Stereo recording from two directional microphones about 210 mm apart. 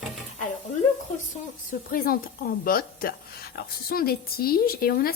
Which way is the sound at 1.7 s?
45° left (ahead or behind).